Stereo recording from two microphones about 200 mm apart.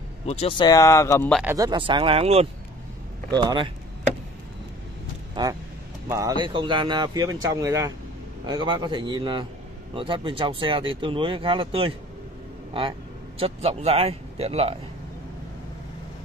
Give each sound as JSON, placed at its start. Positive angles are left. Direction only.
{"t": 0.3, "sound": "speech", "side_deg": 30}
{"t": 1.4, "sound": "speech", "side_deg": -15}
{"t": 5.3, "sound": "speech", "side_deg": -20}
{"t": 13.4, "sound": "a man's voice", "side_deg": -30}